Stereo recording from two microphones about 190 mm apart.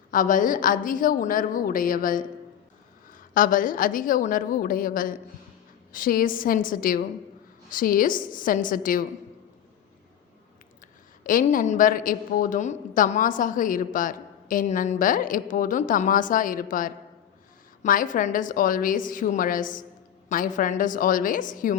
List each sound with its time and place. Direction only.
0.1 s a woman's voice: 45° left (ahead or behind)
11.2 s a woman's voice: 45° left (ahead or behind)